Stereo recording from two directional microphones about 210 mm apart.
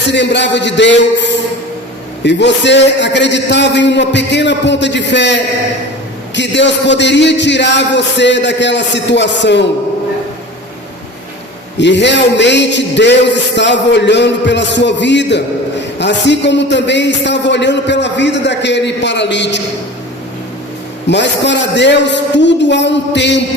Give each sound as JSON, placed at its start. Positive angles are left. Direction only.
{"t": 0.1, "sound": "a man's voice", "side_deg": 55}
{"t": 11.8, "sound": "a man's voice", "side_deg": 55}
{"t": 21.1, "sound": "a man's voice", "side_deg": 55}